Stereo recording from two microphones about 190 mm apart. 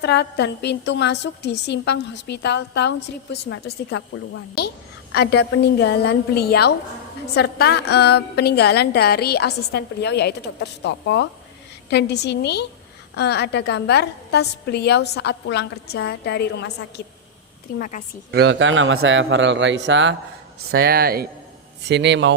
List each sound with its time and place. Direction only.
0.0 s a woman's voice: 60° left (ahead or behind)
3.9 s a woman's voice: 65° left (ahead or behind)
5.1 s a woman's voice: 60° left (ahead or behind)
17.7 s a woman's voice: 45° left (ahead or behind)
18.3 s a man's voice: 65° right (ahead or behind)
20.7 s speech: 55° right (ahead or behind)
21.8 s a man's voice: 65° right (ahead or behind)